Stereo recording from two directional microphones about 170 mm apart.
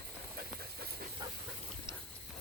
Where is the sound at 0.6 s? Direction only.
65° right (ahead or behind).